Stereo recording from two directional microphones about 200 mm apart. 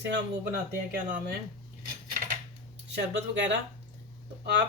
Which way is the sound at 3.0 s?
60° right (ahead or behind).